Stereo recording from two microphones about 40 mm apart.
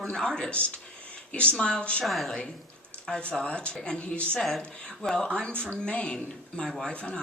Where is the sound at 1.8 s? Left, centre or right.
Left.